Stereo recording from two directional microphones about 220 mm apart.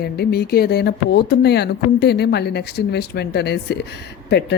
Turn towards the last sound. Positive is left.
turn(degrees=50)  # may be behind; listen again after turning